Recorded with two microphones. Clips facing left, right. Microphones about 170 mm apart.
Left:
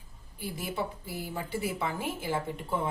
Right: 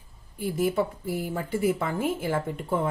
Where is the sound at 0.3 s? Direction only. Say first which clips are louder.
Right 9 dB; 50° right (ahead or behind).